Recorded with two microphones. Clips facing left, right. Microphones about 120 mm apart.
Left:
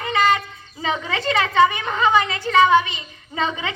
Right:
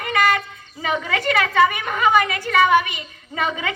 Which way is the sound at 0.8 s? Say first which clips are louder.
Right 1 dB; 20° left (ahead or behind).